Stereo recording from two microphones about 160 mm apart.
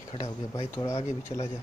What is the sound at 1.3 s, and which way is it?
Speech, 40° left (ahead or behind).